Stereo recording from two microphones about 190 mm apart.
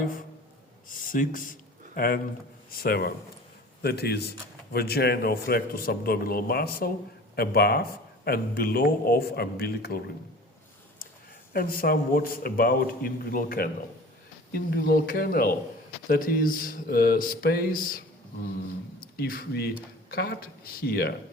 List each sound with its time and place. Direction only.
0.9 s speech: 45° left (ahead or behind)
2.6 s speech: 50° left (ahead or behind)
11.5 s speech: 50° left (ahead or behind)